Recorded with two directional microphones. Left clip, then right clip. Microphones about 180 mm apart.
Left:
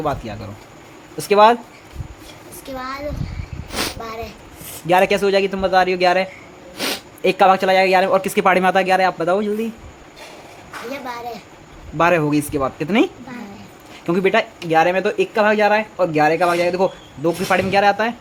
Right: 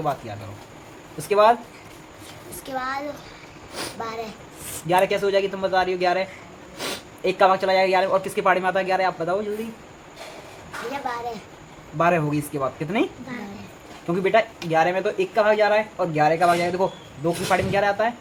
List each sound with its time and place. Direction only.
0.0 s speech: 50° left (ahead or behind)
2.7 s a child's voice: 10° right (ahead or behind)
3.7 s a sound: 60° left (ahead or behind)
4.9 s speech: 60° left (ahead or behind)
11.1 s a child's voice: 10° right (ahead or behind)
11.9 s speech: 50° left (ahead or behind)
14.1 s speech: 50° left (ahead or behind)